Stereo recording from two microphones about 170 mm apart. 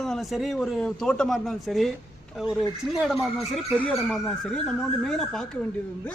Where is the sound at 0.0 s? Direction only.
Centre (ahead or behind).